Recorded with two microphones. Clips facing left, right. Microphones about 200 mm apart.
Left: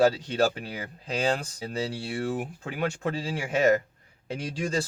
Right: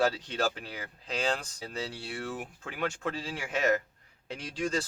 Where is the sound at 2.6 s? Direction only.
15° left (ahead or behind).